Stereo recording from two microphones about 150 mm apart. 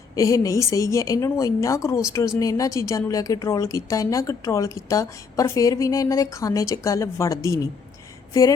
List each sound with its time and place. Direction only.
0.2 s a woman's voice: 20° left (ahead or behind)